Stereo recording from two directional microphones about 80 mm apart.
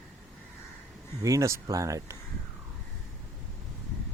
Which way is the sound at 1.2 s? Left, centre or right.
Right.